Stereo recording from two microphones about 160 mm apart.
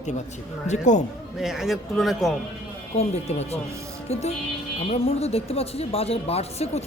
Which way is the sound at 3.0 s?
40° left (ahead or behind).